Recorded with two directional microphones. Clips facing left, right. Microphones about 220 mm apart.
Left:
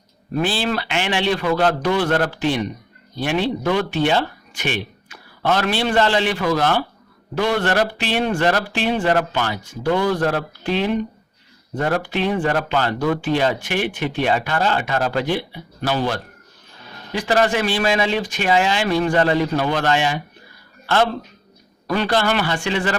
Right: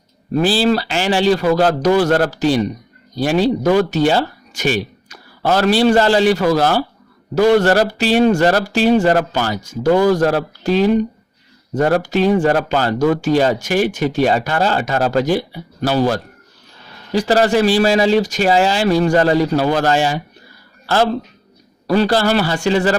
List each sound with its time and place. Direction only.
0.3 s a man's voice: 35° right (ahead or behind)